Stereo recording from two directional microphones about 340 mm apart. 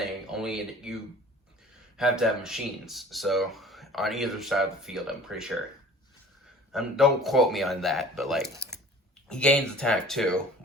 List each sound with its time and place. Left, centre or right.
0.0 s a sound: centre
2.0 s speech: centre
6.7 s speech: centre